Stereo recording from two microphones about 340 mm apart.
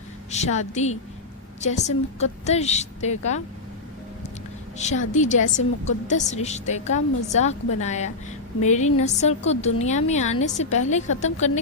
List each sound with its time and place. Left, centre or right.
0.3 s a woman's voice: centre
4.8 s a woman's voice: left